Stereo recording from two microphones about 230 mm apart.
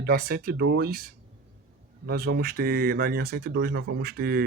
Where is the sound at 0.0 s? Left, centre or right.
Right.